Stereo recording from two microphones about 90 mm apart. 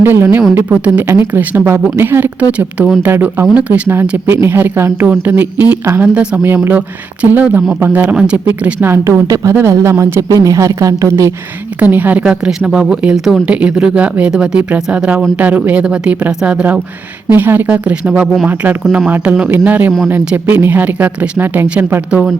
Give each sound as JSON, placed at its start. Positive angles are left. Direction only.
{"t": 0.0, "sound": "speech", "side_deg": -25}
{"t": 4.4, "sound": "speech", "side_deg": -25}
{"t": 8.8, "sound": "a woman's voice", "side_deg": -30}
{"t": 11.8, "sound": "speech", "side_deg": -20}
{"t": 12.2, "sound": "speech", "side_deg": -10}
{"t": 13.5, "sound": "speech", "side_deg": -10}
{"t": 17.3, "sound": "speech", "side_deg": -20}